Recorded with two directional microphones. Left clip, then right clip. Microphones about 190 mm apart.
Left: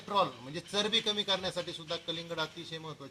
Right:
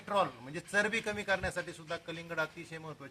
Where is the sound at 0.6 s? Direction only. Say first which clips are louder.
Left 1 dB; 5° right (ahead or behind).